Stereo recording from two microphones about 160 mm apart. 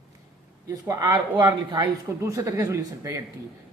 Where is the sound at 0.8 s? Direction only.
20° right (ahead or behind).